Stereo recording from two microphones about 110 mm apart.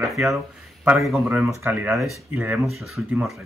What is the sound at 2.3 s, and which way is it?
Speech, 15° right (ahead or behind).